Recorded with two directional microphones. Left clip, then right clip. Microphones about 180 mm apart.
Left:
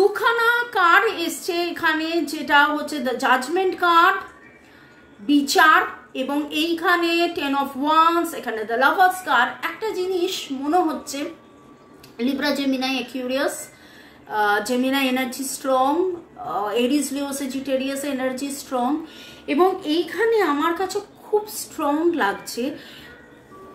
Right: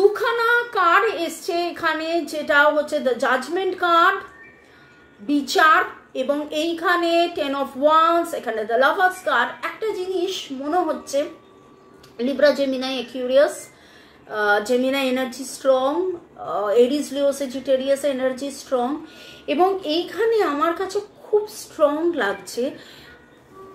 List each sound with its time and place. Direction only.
0.1 s a woman's voice: 20° left (ahead or behind)
5.2 s a woman's voice: 20° left (ahead or behind)
20.2 s a woman's voice: 15° left (ahead or behind)